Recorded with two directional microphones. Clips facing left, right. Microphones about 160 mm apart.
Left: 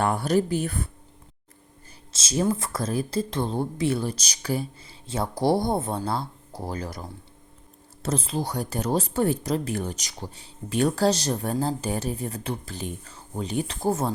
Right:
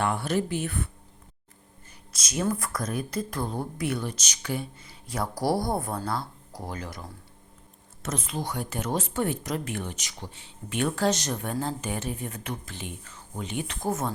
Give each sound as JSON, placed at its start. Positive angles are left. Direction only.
{"t": 0.0, "sound": "speech", "side_deg": 40}
{"t": 2.1, "sound": "speech", "side_deg": 30}